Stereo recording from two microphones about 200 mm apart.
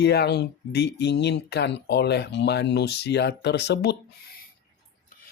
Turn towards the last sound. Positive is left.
turn(degrees=55)  # may be behind; listen again after turning